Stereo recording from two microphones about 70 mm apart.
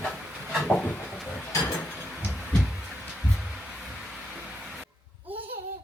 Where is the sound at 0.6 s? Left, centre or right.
Centre.